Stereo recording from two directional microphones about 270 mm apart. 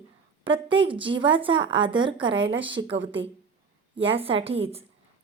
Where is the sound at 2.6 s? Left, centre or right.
Centre.